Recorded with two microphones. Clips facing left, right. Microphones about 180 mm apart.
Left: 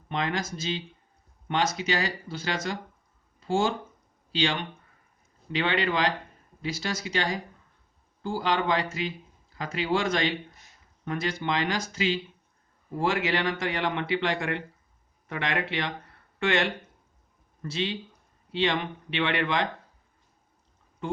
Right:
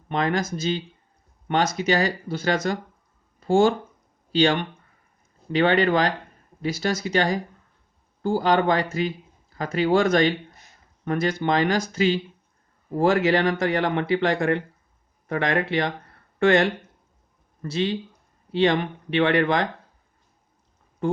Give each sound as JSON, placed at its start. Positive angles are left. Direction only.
{"t": 0.1, "sound": "speech", "side_deg": -45}